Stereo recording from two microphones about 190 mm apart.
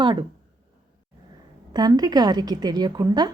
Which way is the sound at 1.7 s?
20° right (ahead or behind).